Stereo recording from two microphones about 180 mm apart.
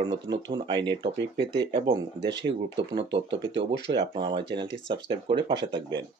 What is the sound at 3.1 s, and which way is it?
Speech, 80° right.